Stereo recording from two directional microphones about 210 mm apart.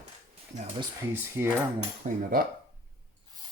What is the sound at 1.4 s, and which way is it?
Cutlery, 10° right (ahead or behind).